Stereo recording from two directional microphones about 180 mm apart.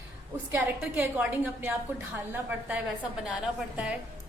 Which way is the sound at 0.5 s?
10° right (ahead or behind).